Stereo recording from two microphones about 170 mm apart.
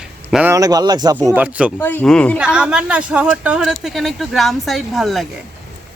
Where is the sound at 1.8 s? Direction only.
10° left (ahead or behind).